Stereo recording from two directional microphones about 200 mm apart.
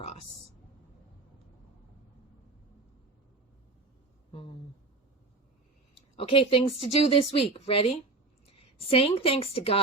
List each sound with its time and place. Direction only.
6.1 s a woman's voice: 25° left (ahead or behind)